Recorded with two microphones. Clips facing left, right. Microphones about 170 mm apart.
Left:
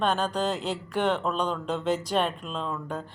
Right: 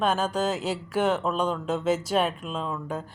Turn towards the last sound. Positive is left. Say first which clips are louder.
# right 1 dB
turn(degrees=-5)  # may be behind; listen again after turning